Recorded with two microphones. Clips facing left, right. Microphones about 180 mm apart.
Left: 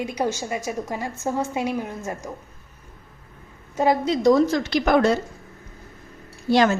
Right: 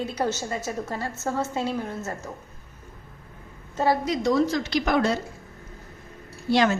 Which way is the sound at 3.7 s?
20° left (ahead or behind).